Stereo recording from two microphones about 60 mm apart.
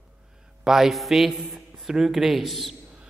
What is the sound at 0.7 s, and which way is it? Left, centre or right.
A man's voice, centre.